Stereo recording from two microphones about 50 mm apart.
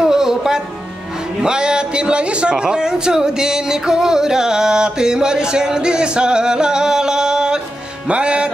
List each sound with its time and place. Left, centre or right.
0.0 s music: centre
1.4 s a man's voice: centre
8.1 s music: right